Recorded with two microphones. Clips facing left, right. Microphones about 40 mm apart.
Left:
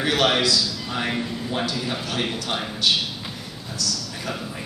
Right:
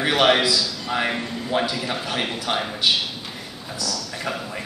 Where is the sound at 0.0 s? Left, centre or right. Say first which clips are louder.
Right 2 dB; centre.